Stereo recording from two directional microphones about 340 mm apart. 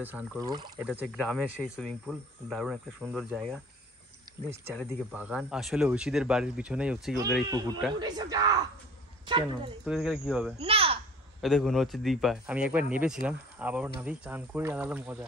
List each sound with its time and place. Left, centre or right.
0.0 s speech: centre
4.6 s speech: centre
9.8 s speech: centre
10.6 s a child's voice: centre
11.4 s speech: centre